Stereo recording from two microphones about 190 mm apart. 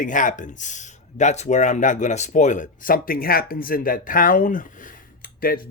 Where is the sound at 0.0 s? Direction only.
45° left (ahead or behind).